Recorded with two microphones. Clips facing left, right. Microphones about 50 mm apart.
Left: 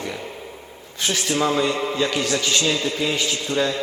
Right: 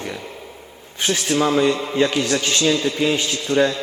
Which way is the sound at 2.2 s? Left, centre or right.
Right.